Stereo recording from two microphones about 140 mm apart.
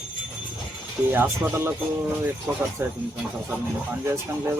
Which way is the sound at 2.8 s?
15° right (ahead or behind).